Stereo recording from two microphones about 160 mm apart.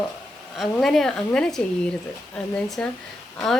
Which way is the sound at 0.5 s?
Centre (ahead or behind).